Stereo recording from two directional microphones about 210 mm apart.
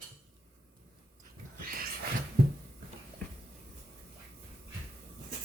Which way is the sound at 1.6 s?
45° right (ahead or behind).